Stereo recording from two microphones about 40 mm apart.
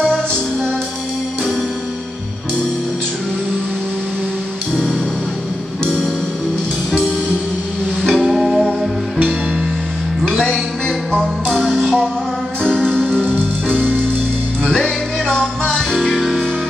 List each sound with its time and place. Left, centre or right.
0.0 s music: centre
8.0 s music: centre
11.4 s music: centre
12.6 s music: centre
14.6 s music: centre
16.0 s music: centre